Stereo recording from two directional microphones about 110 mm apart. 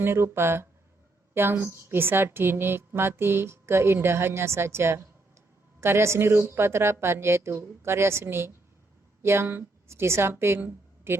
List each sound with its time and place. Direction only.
0.0 s a woman's voice: 20° right (ahead or behind)